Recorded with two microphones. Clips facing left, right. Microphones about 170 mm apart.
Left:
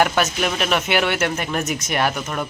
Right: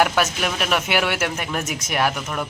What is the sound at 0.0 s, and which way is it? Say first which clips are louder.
Speech: left 1 dB; centre (ahead or behind).